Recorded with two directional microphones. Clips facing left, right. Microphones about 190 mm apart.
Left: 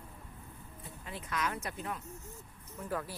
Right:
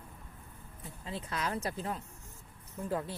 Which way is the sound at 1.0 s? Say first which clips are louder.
Right 1 dB; 30° right (ahead or behind).